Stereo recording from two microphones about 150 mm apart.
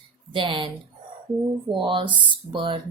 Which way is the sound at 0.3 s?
35° right (ahead or behind).